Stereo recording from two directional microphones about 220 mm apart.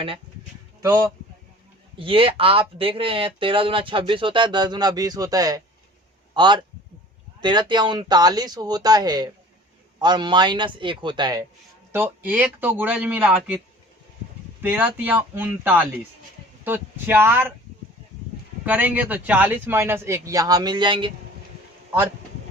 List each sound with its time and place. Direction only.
0.8 s speech: 15° right (ahead or behind)
14.6 s speech: 5° right (ahead or behind)
18.6 s speech: 5° right (ahead or behind)